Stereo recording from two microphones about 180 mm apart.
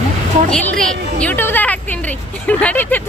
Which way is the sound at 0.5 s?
5° left (ahead or behind).